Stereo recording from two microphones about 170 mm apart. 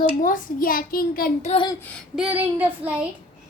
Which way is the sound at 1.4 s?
30° left (ahead or behind).